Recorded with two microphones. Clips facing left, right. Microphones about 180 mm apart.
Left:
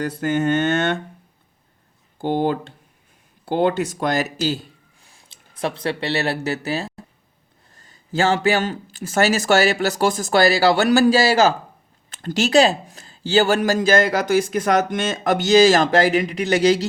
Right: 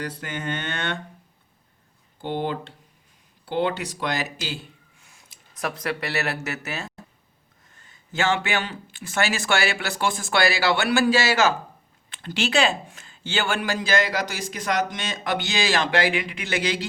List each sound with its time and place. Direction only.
0.0 s speech: 45° left (ahead or behind)
2.1 s speech: 45° left (ahead or behind)